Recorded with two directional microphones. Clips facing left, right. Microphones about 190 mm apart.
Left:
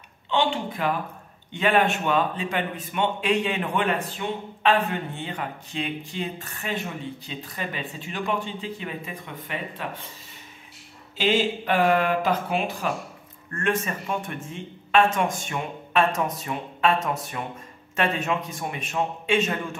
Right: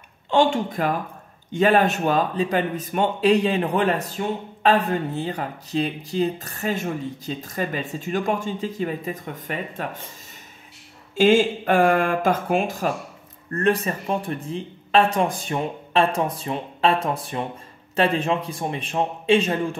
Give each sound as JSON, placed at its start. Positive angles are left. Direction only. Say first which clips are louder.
{"t": 0.3, "sound": "a man's voice", "louder": "right 5 dB", "side_deg": -45}
{"t": 11.1, "sound": "a man's voice", "louder": "right 6 dB", "side_deg": -50}